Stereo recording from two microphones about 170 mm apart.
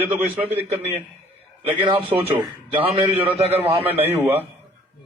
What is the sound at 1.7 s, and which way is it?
A man's voice, 30° right (ahead or behind).